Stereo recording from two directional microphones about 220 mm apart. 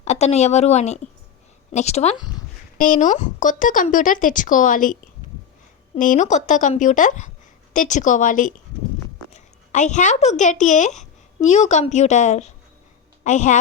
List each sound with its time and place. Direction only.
0.0 s speech: 30° left (ahead or behind)
2.7 s speech: 35° left (ahead or behind)
6.0 s a woman's voice: 35° left (ahead or behind)